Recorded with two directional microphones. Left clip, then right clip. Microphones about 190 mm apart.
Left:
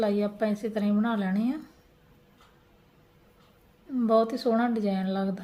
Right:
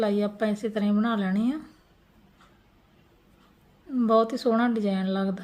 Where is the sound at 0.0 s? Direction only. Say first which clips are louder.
Right 1 dB; 15° right (ahead or behind).